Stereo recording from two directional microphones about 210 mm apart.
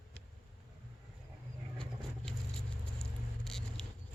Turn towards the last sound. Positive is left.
turn(degrees=0)  # may be behind; listen again after turning